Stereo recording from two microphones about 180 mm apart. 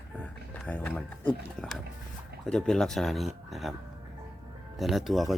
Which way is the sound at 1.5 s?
5° left (ahead or behind).